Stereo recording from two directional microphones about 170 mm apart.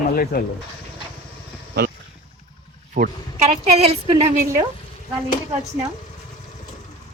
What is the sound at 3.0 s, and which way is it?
Speech, 50° right (ahead or behind).